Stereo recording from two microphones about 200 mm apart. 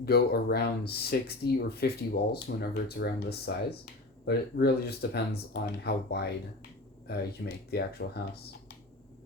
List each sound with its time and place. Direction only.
0.0 s speech: 50° left (ahead or behind)